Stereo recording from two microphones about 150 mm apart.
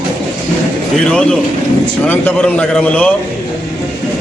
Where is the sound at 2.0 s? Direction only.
10° left (ahead or behind).